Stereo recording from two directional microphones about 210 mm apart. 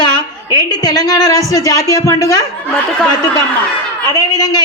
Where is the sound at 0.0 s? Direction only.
20° left (ahead or behind).